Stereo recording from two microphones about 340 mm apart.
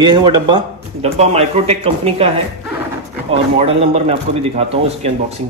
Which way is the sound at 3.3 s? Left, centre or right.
Centre.